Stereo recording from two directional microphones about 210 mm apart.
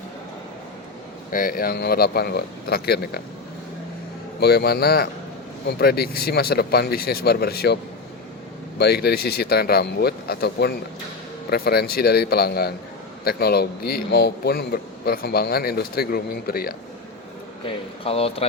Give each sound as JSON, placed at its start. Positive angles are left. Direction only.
{"t": 1.3, "sound": "a man's voice", "side_deg": 40}
{"t": 4.4, "sound": "a man's voice", "side_deg": 50}
{"t": 8.8, "sound": "a man's voice", "side_deg": 50}
{"t": 17.7, "sound": "speech", "side_deg": 25}